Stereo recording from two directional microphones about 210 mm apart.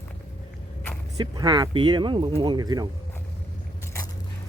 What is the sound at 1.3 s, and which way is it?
Speech, 20° right (ahead or behind).